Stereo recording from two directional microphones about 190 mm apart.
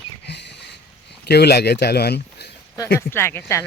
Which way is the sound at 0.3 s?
60° left (ahead or behind).